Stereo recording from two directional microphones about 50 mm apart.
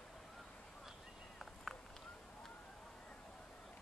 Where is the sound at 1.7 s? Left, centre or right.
Centre.